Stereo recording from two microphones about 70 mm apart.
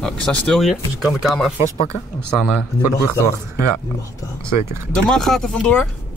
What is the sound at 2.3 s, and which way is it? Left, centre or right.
Speech, centre.